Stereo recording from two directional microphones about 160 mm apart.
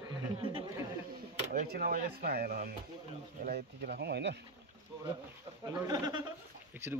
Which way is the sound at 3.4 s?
90° right.